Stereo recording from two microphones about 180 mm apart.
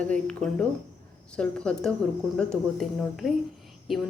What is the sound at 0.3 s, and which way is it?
Speech, 5° left (ahead or behind).